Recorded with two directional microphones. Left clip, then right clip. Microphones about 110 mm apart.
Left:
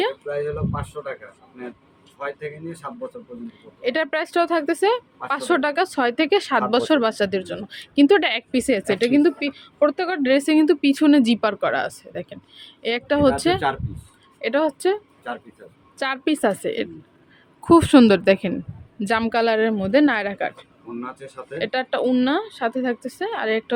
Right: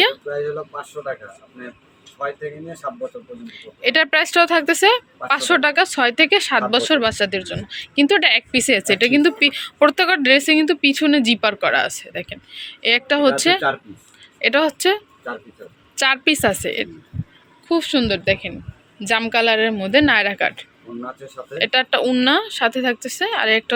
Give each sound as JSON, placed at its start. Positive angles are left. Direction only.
{"t": 0.4, "sound": "speech", "side_deg": 15}
{"t": 3.4, "sound": "speech", "side_deg": 20}
{"t": 8.6, "sound": "speech", "side_deg": 20}
{"t": 9.4, "sound": "speech", "side_deg": -5}
{"t": 9.9, "sound": "speech", "side_deg": 5}
{"t": 10.2, "sound": "a woman's voice", "side_deg": 30}
{"t": 11.5, "sound": "speech", "side_deg": 25}
{"t": 14.4, "sound": "speech", "side_deg": 15}
{"t": 17.9, "sound": "speech", "side_deg": 90}
{"t": 18.9, "sound": "a woman's voice", "side_deg": 45}